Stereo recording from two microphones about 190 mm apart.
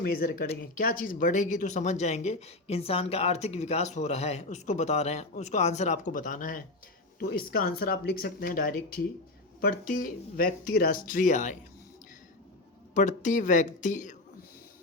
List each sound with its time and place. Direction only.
0.0 s speech: 50° left (ahead or behind)
12.9 s speech: 40° left (ahead or behind)